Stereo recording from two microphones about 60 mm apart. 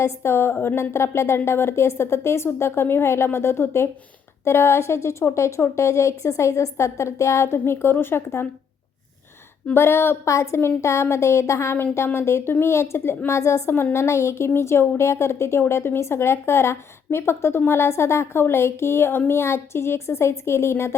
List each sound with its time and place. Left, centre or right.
0.0 s speech: left
0.8 s a woman's voice: left
9.7 s a woman's voice: left
10.2 s a woman's voice: left
11.8 s a woman's voice: left